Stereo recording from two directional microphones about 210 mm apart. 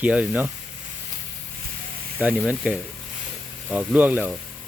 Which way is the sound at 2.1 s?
5° right (ahead or behind).